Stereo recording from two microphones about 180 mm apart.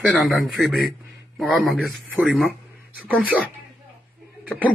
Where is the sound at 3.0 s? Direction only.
10° right (ahead or behind).